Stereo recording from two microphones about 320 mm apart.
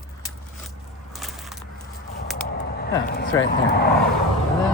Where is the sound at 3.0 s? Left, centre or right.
Left.